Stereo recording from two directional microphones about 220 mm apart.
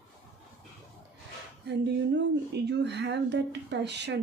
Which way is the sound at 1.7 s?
50° right (ahead or behind).